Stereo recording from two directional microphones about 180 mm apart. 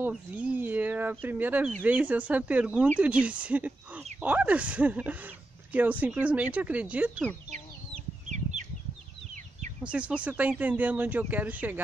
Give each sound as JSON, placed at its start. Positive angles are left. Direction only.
{"t": 0.0, "sound": "speech", "side_deg": -10}
{"t": 8.3, "sound": "chicken", "side_deg": -40}
{"t": 9.8, "sound": "speech", "side_deg": -5}